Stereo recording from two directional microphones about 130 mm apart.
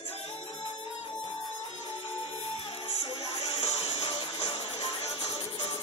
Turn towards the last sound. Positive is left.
turn(degrees=50)  # may be behind; listen again after turning